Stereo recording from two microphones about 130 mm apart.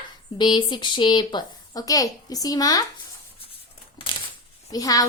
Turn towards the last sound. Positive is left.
turn(degrees=25)  # may be behind; listen again after turning